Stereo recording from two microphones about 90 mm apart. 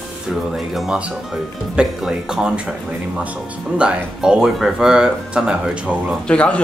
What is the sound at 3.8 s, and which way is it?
Speech, 10° right (ahead or behind).